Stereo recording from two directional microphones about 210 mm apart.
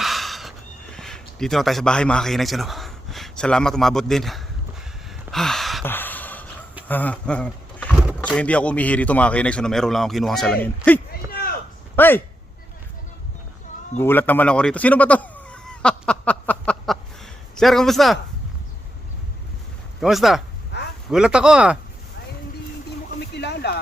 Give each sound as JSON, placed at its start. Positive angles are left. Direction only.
{"t": 0.0, "sound": "horse", "side_deg": 0}
{"t": 0.9, "sound": "speech", "side_deg": 0}
{"t": 5.3, "sound": "gasp", "side_deg": 0}
{"t": 6.8, "sound": "speech", "side_deg": 10}
{"t": 11.3, "sound": "a sound", "side_deg": 45}
{"t": 11.9, "sound": "speech", "side_deg": 10}
{"t": 14.0, "sound": "fowl", "side_deg": 10}
{"t": 17.6, "sound": "speech", "side_deg": 0}
{"t": 20.0, "sound": "speech", "side_deg": 0}
{"t": 20.7, "sound": "a sound", "side_deg": 55}
{"t": 21.1, "sound": "speech", "side_deg": -5}
{"t": 23.3, "sound": "a sound", "side_deg": 50}